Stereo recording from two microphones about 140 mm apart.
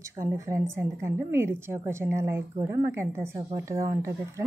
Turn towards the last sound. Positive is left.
turn(degrees=-20)  # may be behind; listen again after turning